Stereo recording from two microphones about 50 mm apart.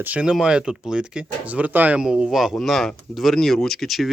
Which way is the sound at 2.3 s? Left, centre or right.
Centre.